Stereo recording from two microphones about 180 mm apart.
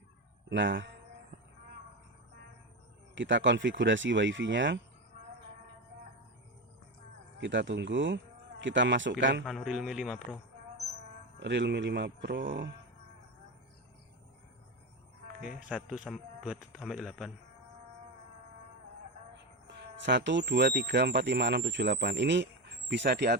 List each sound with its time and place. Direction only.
0.5 s speech: 90° right
3.2 s speech: 90° right
7.3 s speech: 80° right
9.4 s a man's voice: centre (ahead or behind)
11.3 s a man's voice: 80° right; by 12.7 s 60° right (ahead or behind)
15.4 s a man's voice: 5° right (ahead or behind)
19.6 s speech: 75° right (ahead or behind)